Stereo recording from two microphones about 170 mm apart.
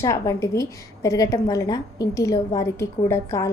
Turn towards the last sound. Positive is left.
turn(degrees=15)  # may be behind; listen again after turning